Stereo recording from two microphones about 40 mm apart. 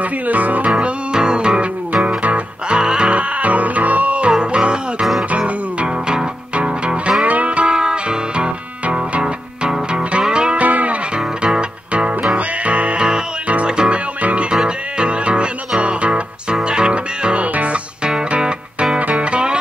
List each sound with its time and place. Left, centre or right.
0.0 s music: right
0.7 s music: right
2.7 s music: right
4.3 s music: right
7.2 s music: right
7.7 s music: right
8.8 s music: right
9.2 s music: right
10.6 s music: right
13.7 s music: right
13.9 s music: right
14.5 s music: right